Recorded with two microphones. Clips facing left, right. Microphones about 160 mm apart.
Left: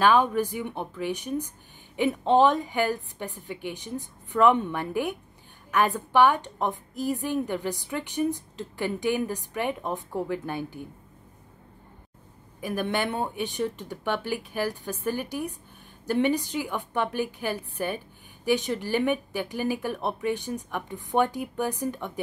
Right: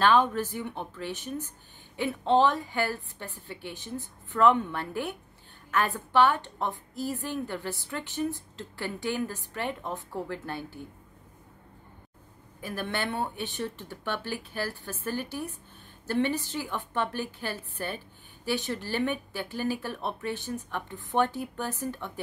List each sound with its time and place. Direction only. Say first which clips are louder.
0.0 s a woman's voice: left 2 dB; 10° left (ahead or behind)
12.5 s a woman's voice: left 5 dB; 15° left (ahead or behind)